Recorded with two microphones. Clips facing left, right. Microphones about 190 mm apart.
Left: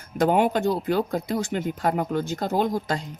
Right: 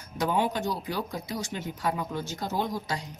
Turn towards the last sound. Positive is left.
turn(degrees=50)  # may be behind; listen again after turning